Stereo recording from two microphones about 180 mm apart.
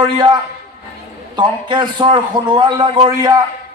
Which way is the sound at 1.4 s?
25° right (ahead or behind).